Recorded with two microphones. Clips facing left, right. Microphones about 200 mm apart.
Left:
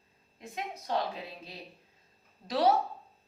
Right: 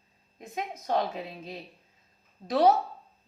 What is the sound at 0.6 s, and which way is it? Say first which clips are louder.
Speech: right 4 dB; 45° right (ahead or behind).